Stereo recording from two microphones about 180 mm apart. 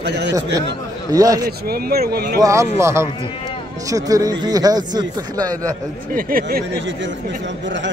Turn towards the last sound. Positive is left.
turn(degrees=-55)  # may be behind; listen again after turning